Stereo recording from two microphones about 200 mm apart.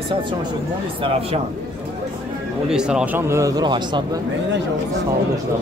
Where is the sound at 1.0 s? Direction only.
25° right (ahead or behind).